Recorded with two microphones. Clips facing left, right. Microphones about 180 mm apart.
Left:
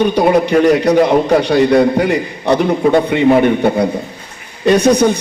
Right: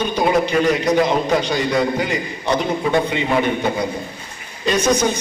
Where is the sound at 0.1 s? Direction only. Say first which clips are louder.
Left 6 dB; 65° left (ahead or behind).